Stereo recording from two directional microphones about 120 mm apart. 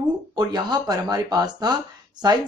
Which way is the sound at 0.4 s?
35° right (ahead or behind).